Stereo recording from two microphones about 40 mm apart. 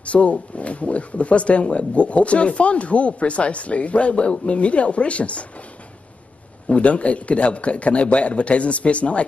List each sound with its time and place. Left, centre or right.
0.0 s speech: left
6.7 s speech: left